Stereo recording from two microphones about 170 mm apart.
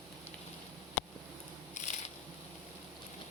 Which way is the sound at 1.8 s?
45° left (ahead or behind).